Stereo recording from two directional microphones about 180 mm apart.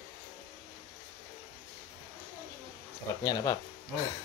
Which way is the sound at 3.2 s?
20° left (ahead or behind).